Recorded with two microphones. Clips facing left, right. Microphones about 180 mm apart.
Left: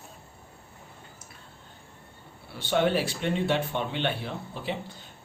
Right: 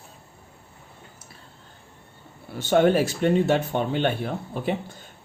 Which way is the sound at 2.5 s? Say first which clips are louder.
Right 6 dB; 45° right (ahead or behind).